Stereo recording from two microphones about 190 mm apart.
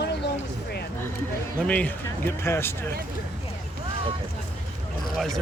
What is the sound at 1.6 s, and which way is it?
Speech, 5° left (ahead or behind).